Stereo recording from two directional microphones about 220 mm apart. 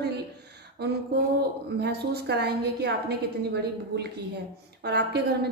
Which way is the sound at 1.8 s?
45° right (ahead or behind).